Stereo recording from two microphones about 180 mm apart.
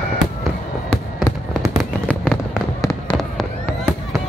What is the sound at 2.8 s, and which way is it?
Fireworks, 20° left (ahead or behind).